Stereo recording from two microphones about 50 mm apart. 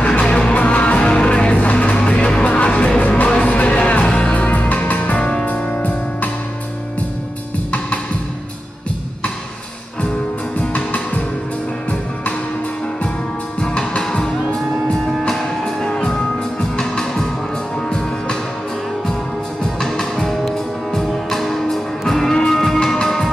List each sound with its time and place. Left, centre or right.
0.0 s music: left
10.6 s music: left
13.6 s music: left
15.2 s music: centre
19.6 s music: centre